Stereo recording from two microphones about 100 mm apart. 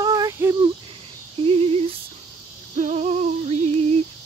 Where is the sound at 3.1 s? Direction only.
90° right.